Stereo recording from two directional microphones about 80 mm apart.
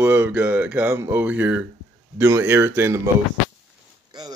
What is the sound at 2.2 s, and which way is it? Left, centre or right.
Speech, right.